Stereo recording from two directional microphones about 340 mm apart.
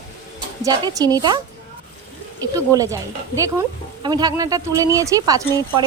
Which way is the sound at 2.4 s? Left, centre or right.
Centre.